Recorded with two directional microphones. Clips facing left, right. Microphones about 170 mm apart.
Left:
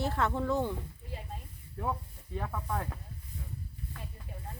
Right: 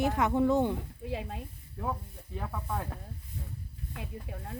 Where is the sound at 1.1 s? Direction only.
85° right.